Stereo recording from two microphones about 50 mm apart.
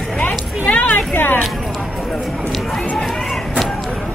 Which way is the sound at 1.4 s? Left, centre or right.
Centre.